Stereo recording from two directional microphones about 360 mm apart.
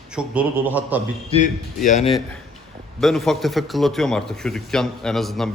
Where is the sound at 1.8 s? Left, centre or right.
Centre.